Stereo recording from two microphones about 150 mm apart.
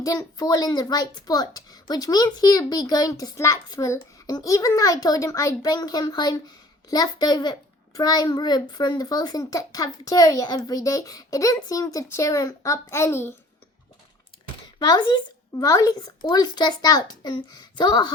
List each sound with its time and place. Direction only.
0.0 s speech: 20° left (ahead or behind)
15.5 s speech: 20° left (ahead or behind)